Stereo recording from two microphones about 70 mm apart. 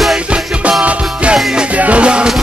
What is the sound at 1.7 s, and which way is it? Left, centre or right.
Music, centre.